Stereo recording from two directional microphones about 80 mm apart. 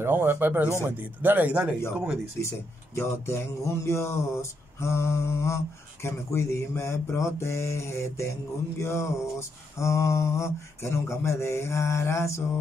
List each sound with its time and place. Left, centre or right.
0.0 s speech: right
2.4 s mantra: left